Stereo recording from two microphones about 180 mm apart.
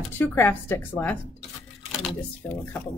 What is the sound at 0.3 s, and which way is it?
Speech, 15° left (ahead or behind).